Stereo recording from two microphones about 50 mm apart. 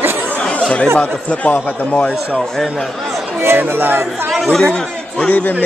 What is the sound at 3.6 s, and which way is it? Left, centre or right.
Speech, right.